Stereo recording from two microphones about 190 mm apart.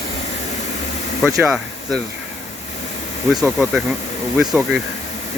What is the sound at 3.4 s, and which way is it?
Speech, centre (ahead or behind).